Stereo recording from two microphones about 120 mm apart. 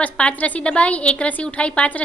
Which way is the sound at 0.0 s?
10° left (ahead or behind).